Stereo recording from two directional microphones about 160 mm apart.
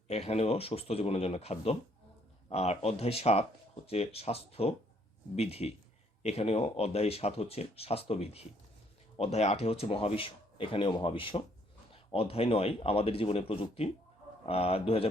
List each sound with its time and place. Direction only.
0.1 s speech: 40° left (ahead or behind)